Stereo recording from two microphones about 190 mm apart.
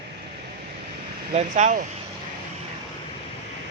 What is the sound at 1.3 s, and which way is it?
Speech, 40° right (ahead or behind).